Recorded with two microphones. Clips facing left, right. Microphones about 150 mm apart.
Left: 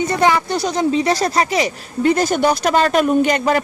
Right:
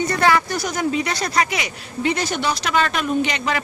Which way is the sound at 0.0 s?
20° left (ahead or behind).